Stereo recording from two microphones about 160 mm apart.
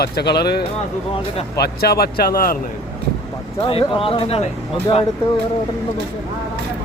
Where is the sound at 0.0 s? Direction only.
90° left.